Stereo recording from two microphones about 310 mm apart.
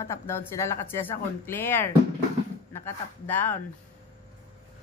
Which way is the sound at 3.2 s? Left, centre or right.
Centre.